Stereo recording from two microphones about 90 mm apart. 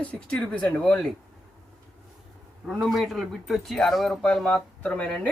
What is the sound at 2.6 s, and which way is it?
Speech, centre (ahead or behind).